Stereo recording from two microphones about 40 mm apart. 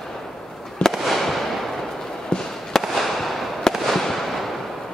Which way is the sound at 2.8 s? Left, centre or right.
Centre.